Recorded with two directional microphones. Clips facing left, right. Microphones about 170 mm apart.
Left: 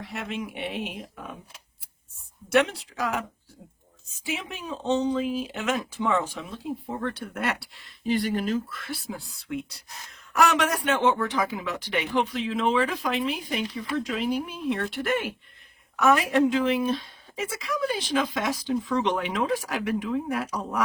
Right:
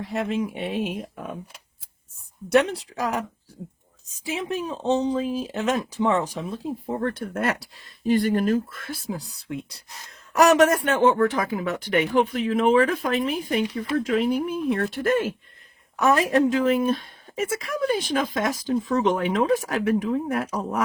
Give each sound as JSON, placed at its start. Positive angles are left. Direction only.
{"t": 0.1, "sound": "speech", "side_deg": -40}
{"t": 2.5, "sound": "a woman's voice", "side_deg": -35}
{"t": 10.4, "sound": "a woman's voice", "side_deg": -50}